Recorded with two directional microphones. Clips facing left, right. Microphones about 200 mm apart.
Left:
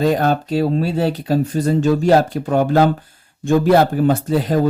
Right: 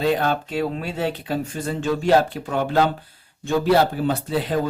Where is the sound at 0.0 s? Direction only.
45° left (ahead or behind).